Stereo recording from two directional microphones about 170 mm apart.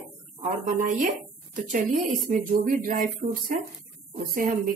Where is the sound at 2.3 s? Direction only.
50° right (ahead or behind).